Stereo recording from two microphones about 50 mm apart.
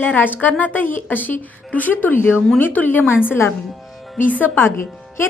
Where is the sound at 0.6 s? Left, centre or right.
Left.